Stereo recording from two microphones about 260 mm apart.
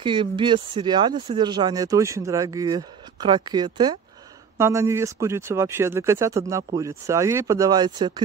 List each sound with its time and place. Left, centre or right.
0.0 s speech: centre